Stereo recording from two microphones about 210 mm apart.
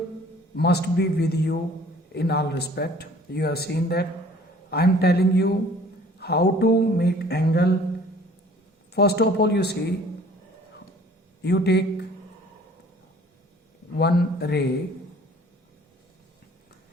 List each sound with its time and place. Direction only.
0.5 s speech: 50° left (ahead or behind)
8.9 s speech: 50° left (ahead or behind)
11.4 s speech: 50° left (ahead or behind)
14.0 s speech: 50° left (ahead or behind)